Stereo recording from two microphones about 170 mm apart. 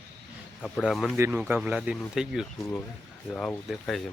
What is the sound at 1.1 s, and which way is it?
Speech, 10° right (ahead or behind).